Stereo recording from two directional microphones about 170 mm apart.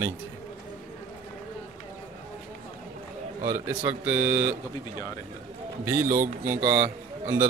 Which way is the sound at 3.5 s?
10° right (ahead or behind).